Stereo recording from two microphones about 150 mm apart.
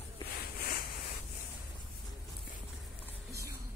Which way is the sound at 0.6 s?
90° left.